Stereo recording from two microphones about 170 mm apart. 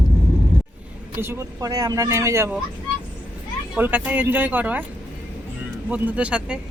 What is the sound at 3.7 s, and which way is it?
Speech, 10° right (ahead or behind).